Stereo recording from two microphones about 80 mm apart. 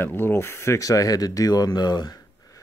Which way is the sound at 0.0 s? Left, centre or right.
Left.